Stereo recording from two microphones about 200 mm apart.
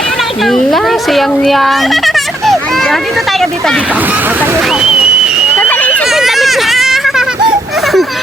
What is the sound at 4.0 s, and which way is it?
Speech, 10° right (ahead or behind).